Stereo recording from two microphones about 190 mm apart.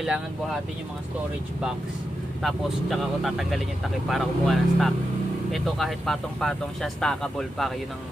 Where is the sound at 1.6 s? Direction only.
5° right (ahead or behind).